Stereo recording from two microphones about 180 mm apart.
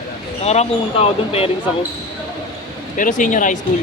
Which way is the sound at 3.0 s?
45° left (ahead or behind).